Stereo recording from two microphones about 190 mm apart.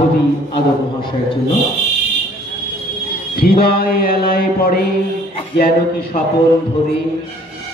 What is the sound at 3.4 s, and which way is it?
Mantra, 55° left (ahead or behind).